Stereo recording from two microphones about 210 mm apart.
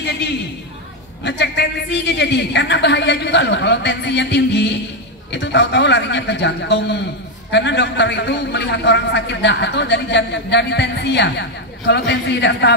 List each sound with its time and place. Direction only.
0.0 s a woman's voice: 55° left (ahead or behind)